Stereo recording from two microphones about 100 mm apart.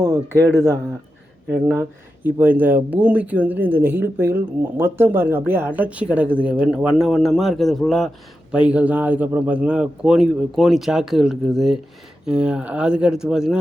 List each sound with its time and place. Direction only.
0.0 s a man's voice: 30° right (ahead or behind); by 8.1 s centre (ahead or behind)
8.5 s speech: 15° right (ahead or behind)